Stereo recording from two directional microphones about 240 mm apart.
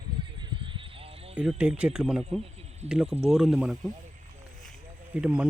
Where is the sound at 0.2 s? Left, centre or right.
Right.